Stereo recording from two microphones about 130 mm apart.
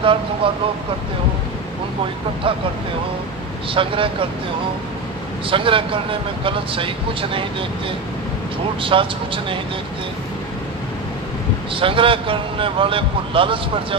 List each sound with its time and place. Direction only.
0.0 s speech: 45° right (ahead or behind)
3.7 s speech: 45° right (ahead or behind)
5.5 s speech: 40° right (ahead or behind)
8.8 s speech: 40° right (ahead or behind)
11.7 s speech: 40° right (ahead or behind)